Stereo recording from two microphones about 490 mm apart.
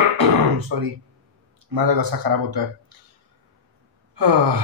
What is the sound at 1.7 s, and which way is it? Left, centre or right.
Speech, right.